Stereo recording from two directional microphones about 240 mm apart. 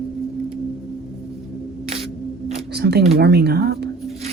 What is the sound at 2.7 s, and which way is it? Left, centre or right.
Speech, right.